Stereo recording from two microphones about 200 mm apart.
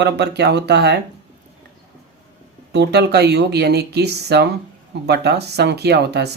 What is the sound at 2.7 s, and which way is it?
Speech, 55° right (ahead or behind).